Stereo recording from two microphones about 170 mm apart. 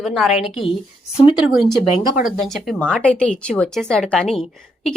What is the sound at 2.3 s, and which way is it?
Speech, centre (ahead or behind).